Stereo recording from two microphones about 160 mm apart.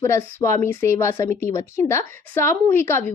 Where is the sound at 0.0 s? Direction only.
15° left (ahead or behind).